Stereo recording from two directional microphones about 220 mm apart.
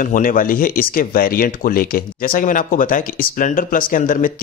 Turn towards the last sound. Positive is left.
turn(degrees=35)  # may be behind; listen again after turning